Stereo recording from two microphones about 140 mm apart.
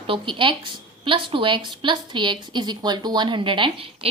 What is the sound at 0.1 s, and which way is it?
A woman's voice, 35° right (ahead or behind).